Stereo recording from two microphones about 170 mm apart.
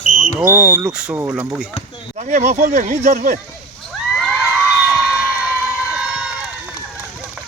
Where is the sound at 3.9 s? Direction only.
Centre (ahead or behind).